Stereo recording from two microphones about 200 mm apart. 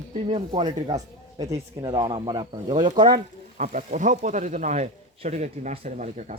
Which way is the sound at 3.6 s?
40° right (ahead or behind).